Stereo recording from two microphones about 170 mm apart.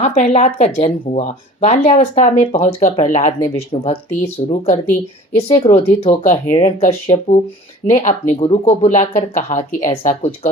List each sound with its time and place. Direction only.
0.0 s speech: 45° left (ahead or behind)